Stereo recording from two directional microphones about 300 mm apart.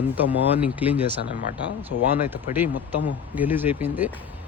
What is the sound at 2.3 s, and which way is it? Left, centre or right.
A man's voice, centre.